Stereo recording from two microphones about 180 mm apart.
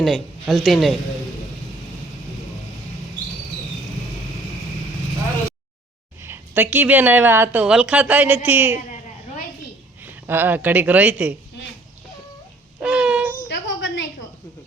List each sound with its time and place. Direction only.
0.0 s speech: centre (ahead or behind)
6.2 s a woman's voice: 10° right (ahead or behind)
10.0 s speech: 10° right (ahead or behind)
12.8 s child singing: 5° right (ahead or behind)
13.5 s a sound: 90° left